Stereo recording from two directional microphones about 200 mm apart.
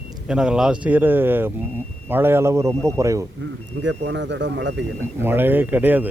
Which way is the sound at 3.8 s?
65° right (ahead or behind).